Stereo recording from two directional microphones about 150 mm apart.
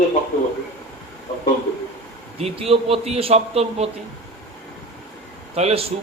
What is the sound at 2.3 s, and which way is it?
A man's voice, 40° right (ahead or behind).